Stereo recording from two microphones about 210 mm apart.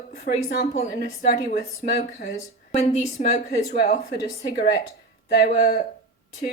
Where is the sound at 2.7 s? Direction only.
30° left (ahead or behind).